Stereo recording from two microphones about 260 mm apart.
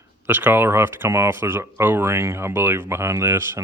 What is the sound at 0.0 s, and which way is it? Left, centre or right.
Speech, centre.